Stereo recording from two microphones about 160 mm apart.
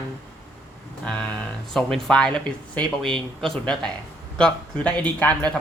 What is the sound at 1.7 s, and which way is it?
A man's voice, 5° left (ahead or behind).